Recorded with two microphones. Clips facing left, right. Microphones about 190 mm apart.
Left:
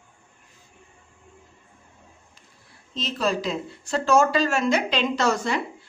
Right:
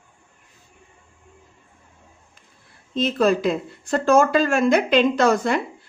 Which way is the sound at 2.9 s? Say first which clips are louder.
Right 7 dB; 55° right (ahead or behind).